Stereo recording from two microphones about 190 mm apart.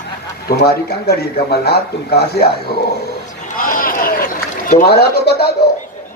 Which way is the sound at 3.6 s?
45° left (ahead or behind).